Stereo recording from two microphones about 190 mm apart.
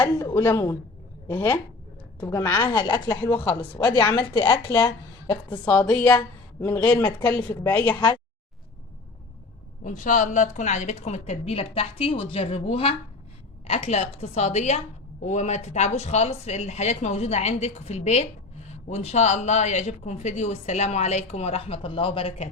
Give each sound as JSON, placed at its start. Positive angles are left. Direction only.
{"t": 0.0, "sound": "a woman's voice", "side_deg": 10}
{"t": 3.3, "sound": "a woman's voice", "side_deg": 10}
{"t": 4.4, "sound": "speech", "side_deg": 25}
{"t": 5.5, "sound": "a woman's voice", "side_deg": 10}
{"t": 9.8, "sound": "a man's voice", "side_deg": 40}